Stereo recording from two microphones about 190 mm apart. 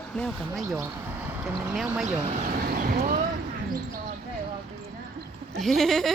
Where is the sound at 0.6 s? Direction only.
15° right (ahead or behind).